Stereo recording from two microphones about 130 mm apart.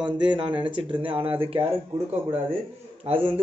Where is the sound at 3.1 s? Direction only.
45° right (ahead or behind).